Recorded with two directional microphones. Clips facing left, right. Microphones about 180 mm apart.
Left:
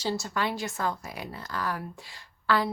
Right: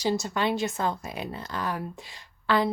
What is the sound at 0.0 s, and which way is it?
Speech, 20° right (ahead or behind).